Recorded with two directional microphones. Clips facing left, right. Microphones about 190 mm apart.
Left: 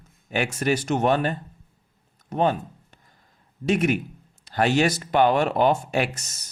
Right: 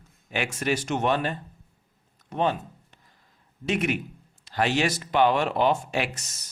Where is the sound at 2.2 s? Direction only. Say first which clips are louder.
Left 3 dB; 45° left (ahead or behind).